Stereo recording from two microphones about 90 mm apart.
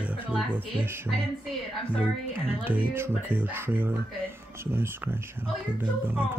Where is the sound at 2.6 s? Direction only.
20° right (ahead or behind).